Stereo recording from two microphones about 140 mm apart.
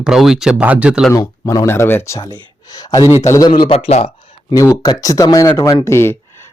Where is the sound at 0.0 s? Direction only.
5° right (ahead or behind).